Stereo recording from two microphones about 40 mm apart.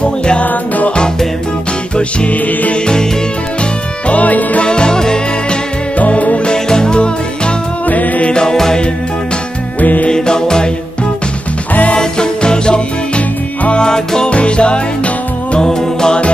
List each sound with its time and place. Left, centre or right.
0.2 s music: left
0.5 s music: left
2.0 s music: left
4.1 s music: left
4.6 s music: left
5.9 s music: left
6.5 s music: centre
7.8 s music: left
8.3 s music: centre
9.8 s music: left
10.0 s music: centre
12.0 s music: centre
14.3 s music: left
15.6 s music: centre